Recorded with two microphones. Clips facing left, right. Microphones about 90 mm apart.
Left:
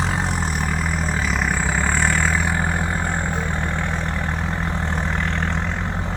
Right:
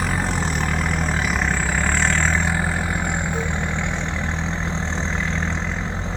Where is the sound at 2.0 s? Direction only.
15° left (ahead or behind).